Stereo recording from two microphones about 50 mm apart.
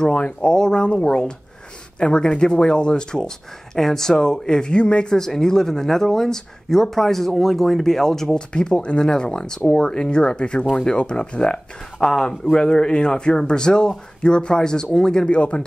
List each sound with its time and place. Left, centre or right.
0.0 s speech: left; by 8.4 s centre
8.4 s speech: centre